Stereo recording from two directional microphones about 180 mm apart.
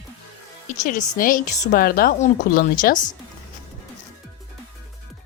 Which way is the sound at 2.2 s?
45° left (ahead or behind).